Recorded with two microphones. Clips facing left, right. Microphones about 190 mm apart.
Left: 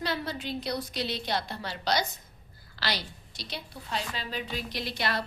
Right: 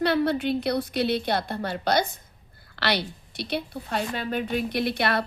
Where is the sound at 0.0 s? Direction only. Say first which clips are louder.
Right 10 dB; 60° right (ahead or behind).